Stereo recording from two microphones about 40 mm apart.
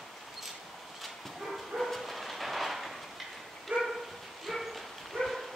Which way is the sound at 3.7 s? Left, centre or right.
Right.